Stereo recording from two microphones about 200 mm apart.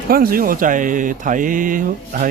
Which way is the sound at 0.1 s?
45° right (ahead or behind).